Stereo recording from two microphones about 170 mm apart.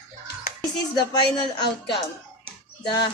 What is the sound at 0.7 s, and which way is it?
Speech, 25° left (ahead or behind).